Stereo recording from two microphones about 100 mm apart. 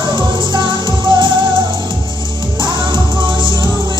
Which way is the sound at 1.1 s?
50° right (ahead or behind).